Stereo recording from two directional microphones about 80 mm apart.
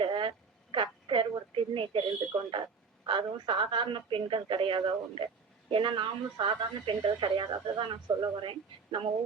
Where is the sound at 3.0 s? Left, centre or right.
Right.